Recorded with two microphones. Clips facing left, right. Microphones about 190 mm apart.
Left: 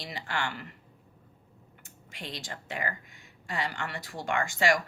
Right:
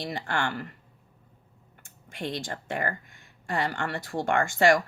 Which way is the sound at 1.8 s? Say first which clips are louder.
Right 9 dB; 55° right (ahead or behind).